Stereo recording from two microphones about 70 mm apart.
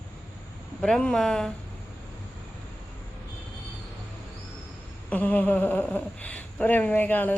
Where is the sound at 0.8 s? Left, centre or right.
Centre.